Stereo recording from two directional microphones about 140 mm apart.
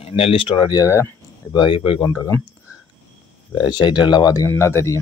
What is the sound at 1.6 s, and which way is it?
Speech, 40° left (ahead or behind).